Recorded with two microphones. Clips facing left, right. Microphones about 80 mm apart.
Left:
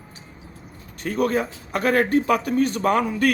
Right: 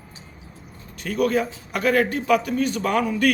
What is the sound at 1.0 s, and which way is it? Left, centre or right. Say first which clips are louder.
A man's voice: even; left.